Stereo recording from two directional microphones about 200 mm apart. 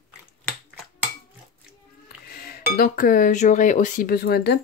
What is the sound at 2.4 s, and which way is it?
Speech, 50° left (ahead or behind).